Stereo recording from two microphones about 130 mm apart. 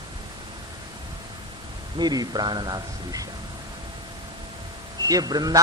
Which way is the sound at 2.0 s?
30° right (ahead or behind).